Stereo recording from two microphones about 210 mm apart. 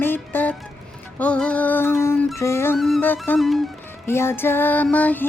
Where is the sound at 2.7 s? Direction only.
Centre (ahead or behind).